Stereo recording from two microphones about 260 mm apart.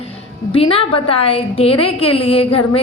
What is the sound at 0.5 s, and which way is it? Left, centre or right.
A woman's voice, left.